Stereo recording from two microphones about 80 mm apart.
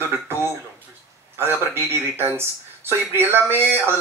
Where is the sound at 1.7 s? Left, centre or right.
Right.